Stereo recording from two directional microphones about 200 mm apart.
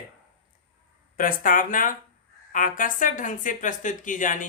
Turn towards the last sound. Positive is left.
turn(degrees=40)  # may be behind; listen again after turning